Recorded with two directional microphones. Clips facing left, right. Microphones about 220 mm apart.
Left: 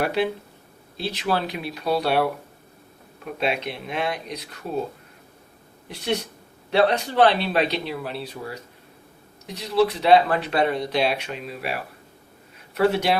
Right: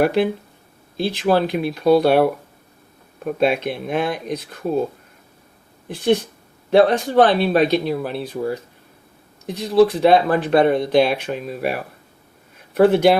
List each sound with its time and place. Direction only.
0.0 s speech: 50° right (ahead or behind)
6.7 s speech: 50° right (ahead or behind)